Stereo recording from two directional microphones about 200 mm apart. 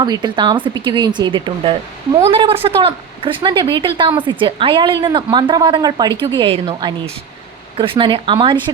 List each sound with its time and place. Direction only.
0.0 s a woman's voice: 20° right (ahead or behind)